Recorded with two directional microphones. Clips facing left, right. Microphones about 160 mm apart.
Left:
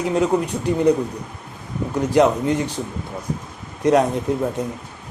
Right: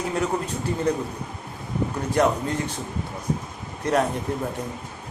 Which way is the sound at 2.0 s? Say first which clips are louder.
Left 6 dB; 15° left (ahead or behind).